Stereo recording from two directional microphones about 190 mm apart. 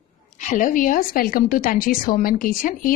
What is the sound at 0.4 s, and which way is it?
A woman's voice, 40° left (ahead or behind).